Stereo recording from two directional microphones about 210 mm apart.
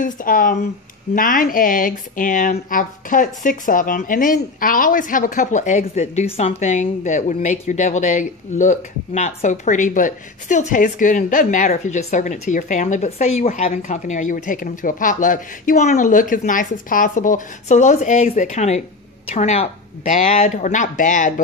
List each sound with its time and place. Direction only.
0.0 s speech: 40° left (ahead or behind)